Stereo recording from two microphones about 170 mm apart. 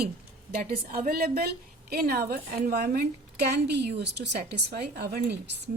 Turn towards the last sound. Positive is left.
turn(degrees=-70)  # may be behind; listen again after turning